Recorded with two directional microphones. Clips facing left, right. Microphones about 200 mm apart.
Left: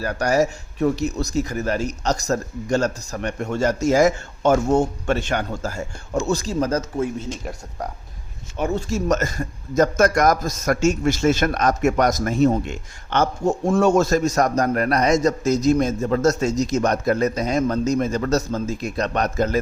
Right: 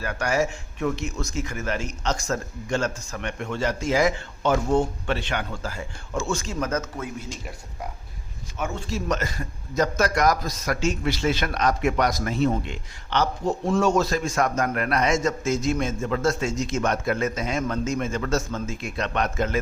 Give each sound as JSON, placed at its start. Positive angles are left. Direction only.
{"t": 0.0, "sound": "a man's voice", "side_deg": 40}
{"t": 8.5, "sound": "a man's voice", "side_deg": 35}